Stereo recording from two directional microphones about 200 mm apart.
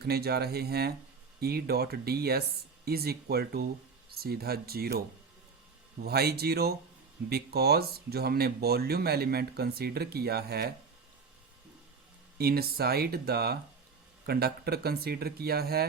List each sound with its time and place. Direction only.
0.0 s speech: 50° right (ahead or behind)
12.4 s speech: 50° right (ahead or behind)